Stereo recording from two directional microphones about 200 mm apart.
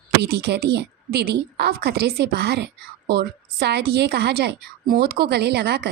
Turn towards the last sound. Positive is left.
turn(degrees=-55)  # may be behind; listen again after turning